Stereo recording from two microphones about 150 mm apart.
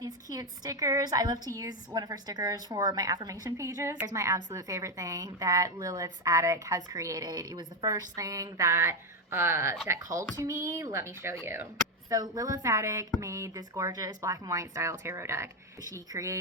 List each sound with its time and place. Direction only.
0.0 s a woman's voice: 25° right (ahead or behind)
12.1 s a woman's voice: 25° right (ahead or behind)